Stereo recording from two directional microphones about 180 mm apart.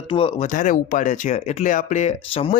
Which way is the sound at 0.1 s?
30° left (ahead or behind).